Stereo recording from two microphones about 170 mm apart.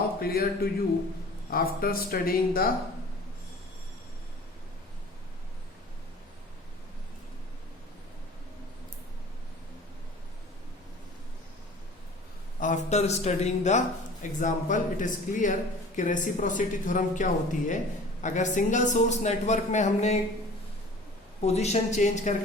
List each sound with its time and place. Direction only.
0.2 s speech: 60° left (ahead or behind)
12.5 s a man's voice: 45° left (ahead or behind)
21.4 s a man's voice: 40° left (ahead or behind)